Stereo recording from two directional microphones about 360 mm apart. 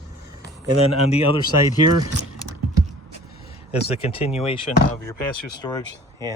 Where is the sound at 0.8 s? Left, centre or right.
Centre.